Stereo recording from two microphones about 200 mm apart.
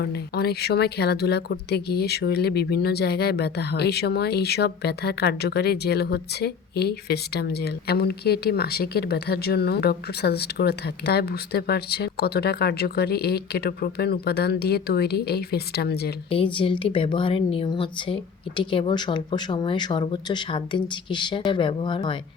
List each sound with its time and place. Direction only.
0.0 s a woman's voice: 50° left (ahead or behind)
16.3 s a woman's voice: 25° left (ahead or behind)